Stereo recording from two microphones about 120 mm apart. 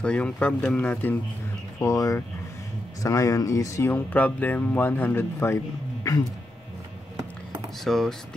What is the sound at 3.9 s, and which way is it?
Speech, 15° left (ahead or behind).